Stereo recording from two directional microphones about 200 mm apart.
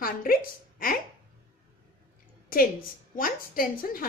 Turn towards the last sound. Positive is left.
turn(degrees=45)  # may be behind; listen again after turning